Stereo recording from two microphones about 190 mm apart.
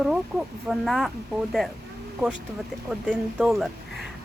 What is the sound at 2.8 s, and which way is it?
Speech, centre (ahead or behind).